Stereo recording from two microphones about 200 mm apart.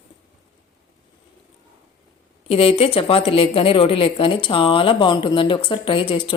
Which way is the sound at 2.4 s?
30° left (ahead or behind).